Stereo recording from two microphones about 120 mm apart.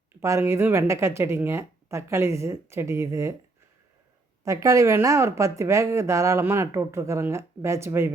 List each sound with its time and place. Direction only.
0.2 s speech: 20° right (ahead or behind)
4.4 s speech: 25° right (ahead or behind)